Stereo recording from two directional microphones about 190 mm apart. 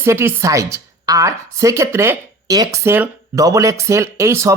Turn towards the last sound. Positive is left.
turn(degrees=-15)  # may be behind; listen again after turning